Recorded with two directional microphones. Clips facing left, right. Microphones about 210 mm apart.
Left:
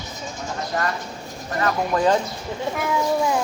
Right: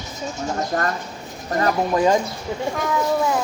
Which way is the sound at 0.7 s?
45° right (ahead or behind).